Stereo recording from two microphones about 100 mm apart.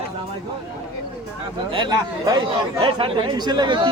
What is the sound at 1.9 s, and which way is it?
Speech, 40° right (ahead or behind).